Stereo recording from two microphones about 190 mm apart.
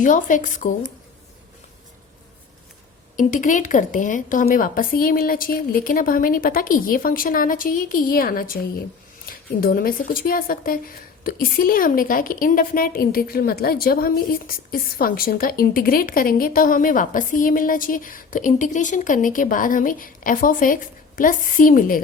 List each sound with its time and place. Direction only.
0.0 s speech: 45° left (ahead or behind)
3.2 s speech: 45° left (ahead or behind)